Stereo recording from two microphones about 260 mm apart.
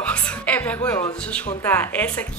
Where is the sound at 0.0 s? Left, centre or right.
Centre.